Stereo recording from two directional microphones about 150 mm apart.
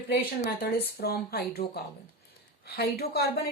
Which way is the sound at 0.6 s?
90° left.